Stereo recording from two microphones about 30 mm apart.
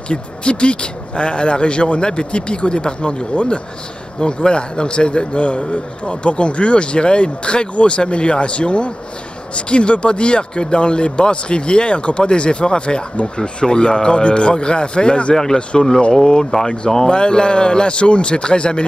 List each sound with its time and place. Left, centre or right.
0.1 s a man's voice: left
4.2 s a man's voice: left
15.3 s a man's voice: centre; by 18.9 s left